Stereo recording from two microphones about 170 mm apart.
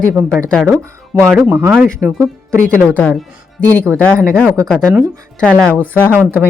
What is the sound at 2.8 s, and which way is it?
Speech, 5° left (ahead or behind).